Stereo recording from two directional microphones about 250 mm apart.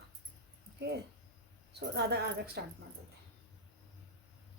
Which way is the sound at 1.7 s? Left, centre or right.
Right.